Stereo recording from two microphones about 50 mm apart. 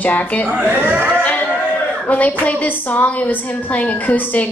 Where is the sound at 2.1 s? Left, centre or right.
Left.